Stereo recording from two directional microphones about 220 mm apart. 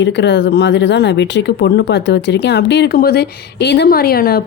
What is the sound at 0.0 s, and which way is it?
Speech, 55° left (ahead or behind).